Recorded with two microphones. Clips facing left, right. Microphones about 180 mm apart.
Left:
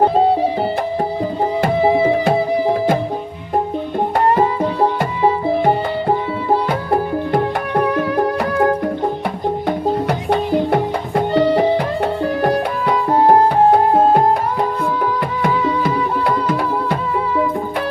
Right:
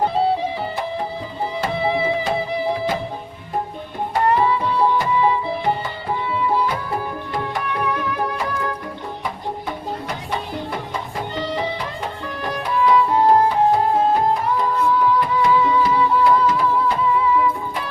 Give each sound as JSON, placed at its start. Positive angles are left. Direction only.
{"t": 1.6, "sound": "music", "side_deg": 45}
{"t": 4.4, "sound": "music", "side_deg": 50}